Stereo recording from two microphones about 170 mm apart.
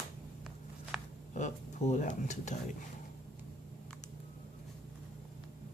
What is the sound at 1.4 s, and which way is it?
Speech, 45° left (ahead or behind).